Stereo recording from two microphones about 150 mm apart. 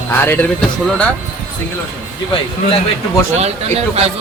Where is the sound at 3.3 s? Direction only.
45° right (ahead or behind).